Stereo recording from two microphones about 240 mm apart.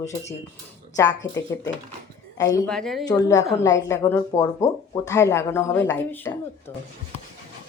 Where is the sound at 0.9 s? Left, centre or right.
Centre.